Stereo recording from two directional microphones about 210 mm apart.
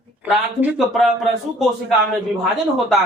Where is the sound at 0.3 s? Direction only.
5° right (ahead or behind).